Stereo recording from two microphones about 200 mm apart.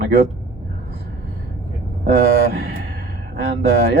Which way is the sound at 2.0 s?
50° right (ahead or behind).